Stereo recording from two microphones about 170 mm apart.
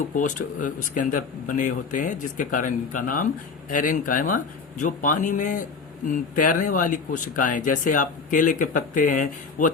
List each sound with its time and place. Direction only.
0.1 s speech: 50° left (ahead or behind)